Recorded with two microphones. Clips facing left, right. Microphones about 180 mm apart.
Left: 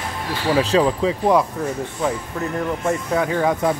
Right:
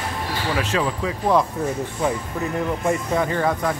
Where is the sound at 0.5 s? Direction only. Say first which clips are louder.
Left 8 dB; 30° left (ahead or behind).